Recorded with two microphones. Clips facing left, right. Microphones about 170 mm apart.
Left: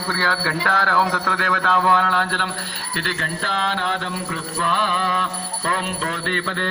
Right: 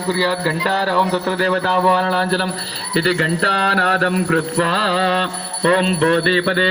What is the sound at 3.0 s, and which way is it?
Mantra, 60° right (ahead or behind).